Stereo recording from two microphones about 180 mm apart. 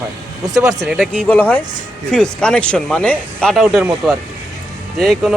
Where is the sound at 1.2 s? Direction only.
10° left (ahead or behind).